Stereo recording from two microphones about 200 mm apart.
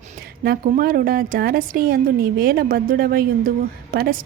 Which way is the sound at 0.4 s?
45° right (ahead or behind).